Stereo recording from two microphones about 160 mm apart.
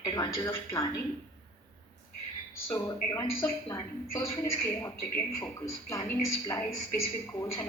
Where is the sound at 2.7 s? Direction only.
20° left (ahead or behind).